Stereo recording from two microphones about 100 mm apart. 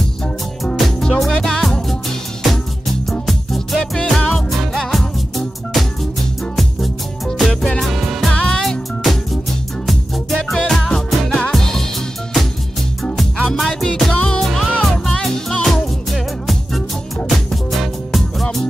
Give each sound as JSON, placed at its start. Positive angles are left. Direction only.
{"t": 0.7, "sound": "music", "side_deg": 0}
{"t": 3.1, "sound": "music", "side_deg": 0}
{"t": 6.5, "sound": "music", "side_deg": 0}
{"t": 13.0, "sound": "music", "side_deg": 5}